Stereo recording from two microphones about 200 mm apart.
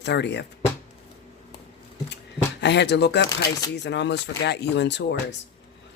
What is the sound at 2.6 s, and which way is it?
Speech, 60° left (ahead or behind).